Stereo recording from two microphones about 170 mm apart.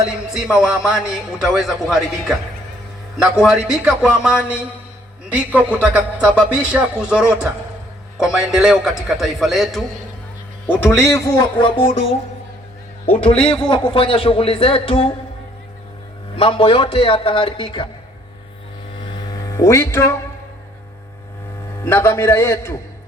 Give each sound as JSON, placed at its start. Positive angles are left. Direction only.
{"t": 0.0, "sound": "a man's voice", "side_deg": -5}
{"t": 3.4, "sound": "a man's voice", "side_deg": -5}
{"t": 10.7, "sound": "speech", "side_deg": 15}
{"t": 13.7, "sound": "a man's voice", "side_deg": 25}
{"t": 16.3, "sound": "a man's voice", "side_deg": 30}
{"t": 19.0, "sound": "hum", "side_deg": 25}
{"t": 21.8, "sound": "a man's voice", "side_deg": 15}